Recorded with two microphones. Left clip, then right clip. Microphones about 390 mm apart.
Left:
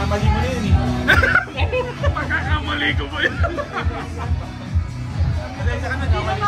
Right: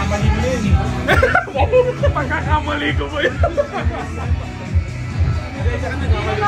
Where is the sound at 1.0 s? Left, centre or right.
Centre.